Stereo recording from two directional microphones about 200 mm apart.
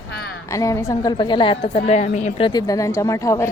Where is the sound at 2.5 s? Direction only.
20° left (ahead or behind).